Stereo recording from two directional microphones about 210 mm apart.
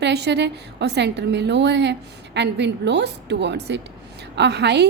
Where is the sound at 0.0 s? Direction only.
55° right (ahead or behind).